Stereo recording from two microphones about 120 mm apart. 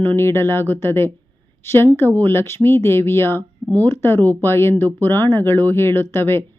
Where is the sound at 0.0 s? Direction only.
20° left (ahead or behind).